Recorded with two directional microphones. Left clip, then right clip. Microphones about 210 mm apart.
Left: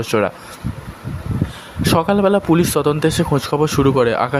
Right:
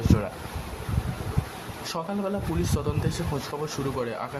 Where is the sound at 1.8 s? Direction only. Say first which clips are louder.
Left 16 dB; 35° left (ahead or behind).